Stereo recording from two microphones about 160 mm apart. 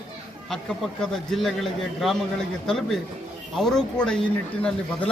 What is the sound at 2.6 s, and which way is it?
Speech, centre (ahead or behind).